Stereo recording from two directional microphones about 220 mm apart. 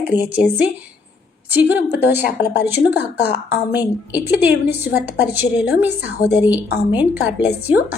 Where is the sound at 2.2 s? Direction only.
50° left (ahead or behind).